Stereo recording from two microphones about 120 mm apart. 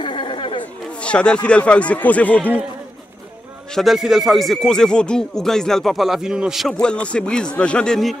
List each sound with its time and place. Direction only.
0.0 s chatter: 45° left (ahead or behind)
1.0 s speech: 10° left (ahead or behind)
3.7 s speech: centre (ahead or behind)